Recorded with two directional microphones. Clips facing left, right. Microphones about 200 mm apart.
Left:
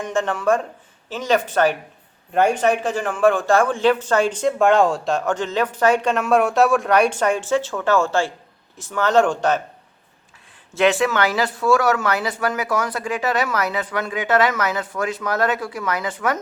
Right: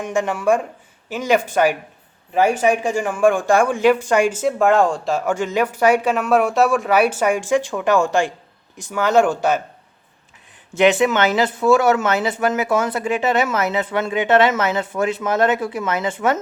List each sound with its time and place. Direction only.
0.0 s speech: 10° right (ahead or behind)
10.8 s speech: 20° right (ahead or behind)